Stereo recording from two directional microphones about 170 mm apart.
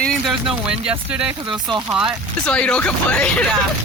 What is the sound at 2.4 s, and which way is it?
Speech, 5° left (ahead or behind).